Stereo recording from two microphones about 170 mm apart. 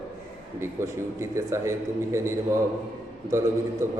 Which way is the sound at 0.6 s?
15° right (ahead or behind).